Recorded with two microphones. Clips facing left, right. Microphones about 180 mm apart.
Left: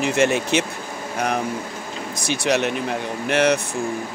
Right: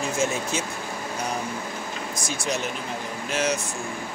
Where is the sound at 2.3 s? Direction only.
70° left (ahead or behind).